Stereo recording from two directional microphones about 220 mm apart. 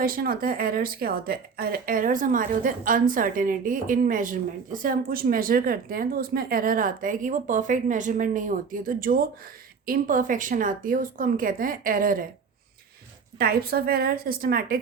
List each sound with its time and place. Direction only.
0.0 s speech: 40° right (ahead or behind)
13.4 s a woman's voice: 45° right (ahead or behind)